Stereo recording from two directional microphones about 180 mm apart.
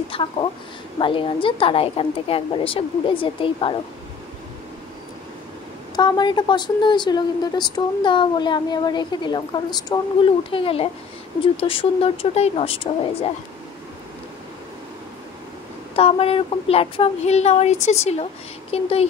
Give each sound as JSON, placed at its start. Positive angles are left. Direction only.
{"t": 0.1, "sound": "speech", "side_deg": 30}
{"t": 5.9, "sound": "speech", "side_deg": 25}
{"t": 16.0, "sound": "speech", "side_deg": 30}